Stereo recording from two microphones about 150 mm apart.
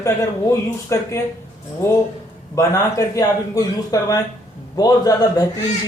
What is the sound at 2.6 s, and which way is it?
Speech, 20° left (ahead or behind).